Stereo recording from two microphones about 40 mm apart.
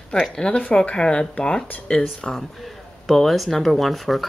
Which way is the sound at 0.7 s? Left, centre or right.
Left.